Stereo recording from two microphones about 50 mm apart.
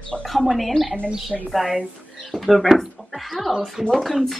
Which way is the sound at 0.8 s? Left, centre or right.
Left.